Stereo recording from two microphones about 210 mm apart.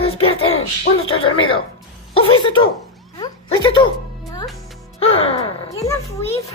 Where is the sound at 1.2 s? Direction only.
25° left (ahead or behind).